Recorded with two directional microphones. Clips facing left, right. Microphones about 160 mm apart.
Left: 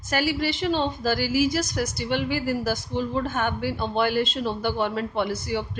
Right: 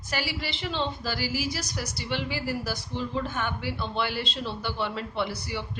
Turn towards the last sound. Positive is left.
turn(degrees=45)  # may be behind; listen again after turning